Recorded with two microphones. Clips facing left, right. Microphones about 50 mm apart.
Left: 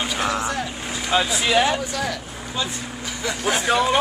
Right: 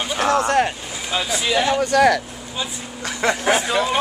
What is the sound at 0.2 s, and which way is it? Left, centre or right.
Vehicle, right.